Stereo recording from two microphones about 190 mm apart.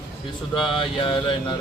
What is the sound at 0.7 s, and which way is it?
Music, 25° left (ahead or behind).